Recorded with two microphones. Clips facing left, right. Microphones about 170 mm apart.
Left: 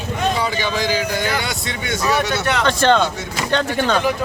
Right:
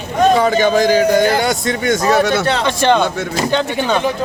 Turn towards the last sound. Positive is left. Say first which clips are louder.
# right 2 dB
turn(degrees=-10)  # may be behind; listen again after turning